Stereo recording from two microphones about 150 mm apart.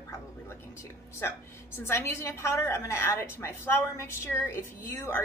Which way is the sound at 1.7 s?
15° left (ahead or behind).